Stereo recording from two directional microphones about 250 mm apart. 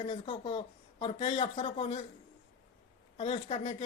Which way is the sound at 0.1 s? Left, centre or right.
Left.